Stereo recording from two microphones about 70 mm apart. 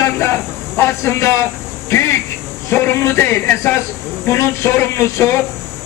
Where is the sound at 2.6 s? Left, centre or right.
Left.